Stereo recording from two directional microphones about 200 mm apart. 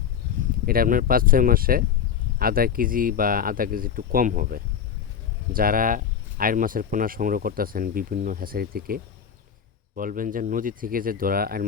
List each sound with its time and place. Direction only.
0.6 s speech: 45° right (ahead or behind)